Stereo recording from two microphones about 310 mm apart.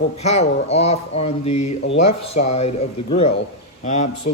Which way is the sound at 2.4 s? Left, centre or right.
Centre.